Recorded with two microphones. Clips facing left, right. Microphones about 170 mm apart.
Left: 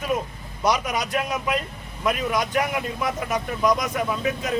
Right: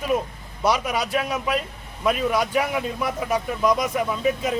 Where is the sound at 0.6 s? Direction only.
5° right (ahead or behind).